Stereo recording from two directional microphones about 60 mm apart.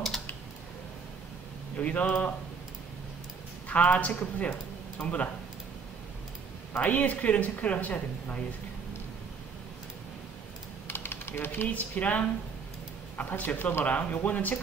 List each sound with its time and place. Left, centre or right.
1.8 s speech: left
3.6 s a man's voice: left
6.7 s speech: left
10.9 s speech: left